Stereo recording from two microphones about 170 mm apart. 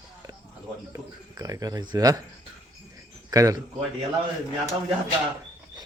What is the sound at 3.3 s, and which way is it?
Speech, 20° right (ahead or behind).